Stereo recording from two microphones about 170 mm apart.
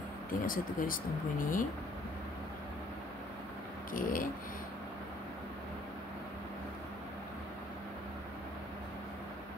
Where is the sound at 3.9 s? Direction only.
55° left (ahead or behind).